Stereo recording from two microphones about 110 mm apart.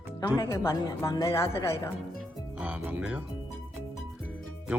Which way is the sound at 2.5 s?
15° right (ahead or behind).